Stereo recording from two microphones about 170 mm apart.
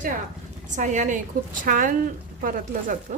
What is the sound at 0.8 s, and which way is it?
Speech, 45° right (ahead or behind).